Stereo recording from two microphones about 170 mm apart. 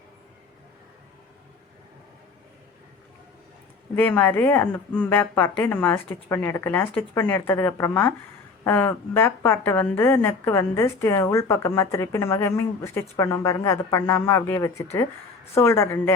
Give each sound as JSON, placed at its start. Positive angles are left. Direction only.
{"t": 3.9, "sound": "a woman's voice", "side_deg": 10}